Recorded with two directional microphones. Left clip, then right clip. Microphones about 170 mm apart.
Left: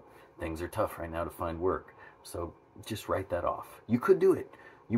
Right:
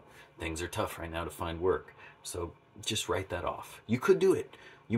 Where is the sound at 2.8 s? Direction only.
10° right (ahead or behind).